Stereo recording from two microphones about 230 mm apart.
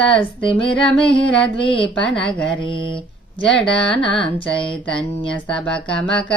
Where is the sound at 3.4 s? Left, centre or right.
Centre.